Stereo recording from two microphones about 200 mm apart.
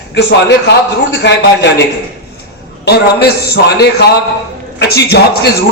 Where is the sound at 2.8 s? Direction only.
55° left (ahead or behind).